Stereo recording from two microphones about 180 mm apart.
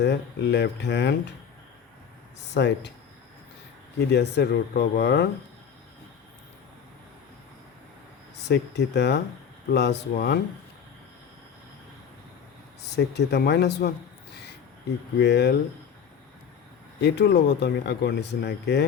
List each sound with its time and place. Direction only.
0.0 s speech: 70° left (ahead or behind)
2.6 s speech: 75° left (ahead or behind)
3.9 s speech: 65° left (ahead or behind)
8.4 s speech: 65° left (ahead or behind)
13.0 s speech: 65° left (ahead or behind)
15.2 s speech: 65° left (ahead or behind)
17.0 s speech: 70° left (ahead or behind)